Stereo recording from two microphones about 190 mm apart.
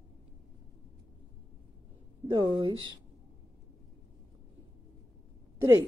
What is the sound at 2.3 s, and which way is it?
Speech, 25° right (ahead or behind).